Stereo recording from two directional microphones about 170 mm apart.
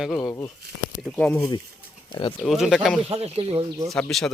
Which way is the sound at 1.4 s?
20° left (ahead or behind).